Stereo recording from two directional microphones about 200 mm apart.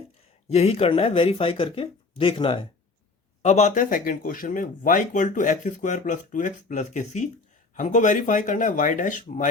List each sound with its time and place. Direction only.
0.4 s speech: 30° left (ahead or behind)